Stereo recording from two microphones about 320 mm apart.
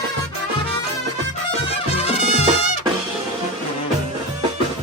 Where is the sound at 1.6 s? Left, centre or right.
Centre.